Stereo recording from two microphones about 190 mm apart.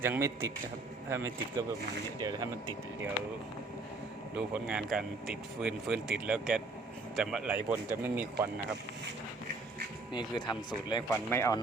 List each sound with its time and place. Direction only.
0.0 s speech: 15° right (ahead or behind)
4.4 s speech: 5° right (ahead or behind)
10.1 s speech: 25° left (ahead or behind)